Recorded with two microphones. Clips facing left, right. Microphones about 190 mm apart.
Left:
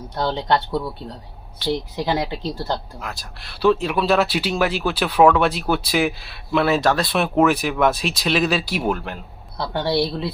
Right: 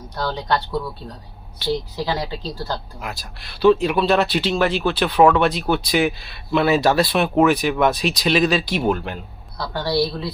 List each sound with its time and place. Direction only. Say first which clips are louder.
0.2 s speech: left 2 dB; 25° left (ahead or behind)
3.0 s speech: right 1 dB; 5° right (ahead or behind)
9.6 s speech: even; 20° left (ahead or behind)